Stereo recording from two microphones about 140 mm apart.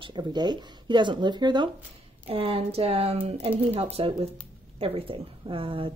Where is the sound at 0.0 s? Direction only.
30° right (ahead or behind).